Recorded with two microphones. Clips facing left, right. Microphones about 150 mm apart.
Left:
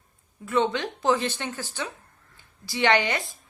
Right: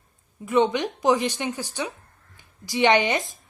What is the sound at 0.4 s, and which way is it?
A woman's voice, 15° right (ahead or behind).